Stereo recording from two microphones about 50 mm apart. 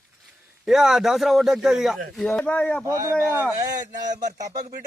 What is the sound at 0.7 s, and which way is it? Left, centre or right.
A man's voice, centre.